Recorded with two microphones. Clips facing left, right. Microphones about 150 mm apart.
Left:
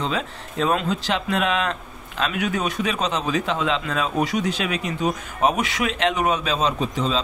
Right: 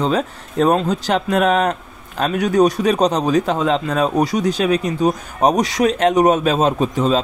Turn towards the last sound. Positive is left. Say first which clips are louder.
# right 7 dB
turn(degrees=-45)  # may be behind; listen again after turning